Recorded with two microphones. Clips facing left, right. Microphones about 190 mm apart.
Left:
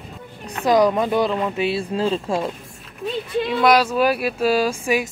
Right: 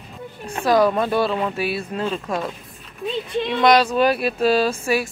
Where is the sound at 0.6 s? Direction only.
15° left (ahead or behind).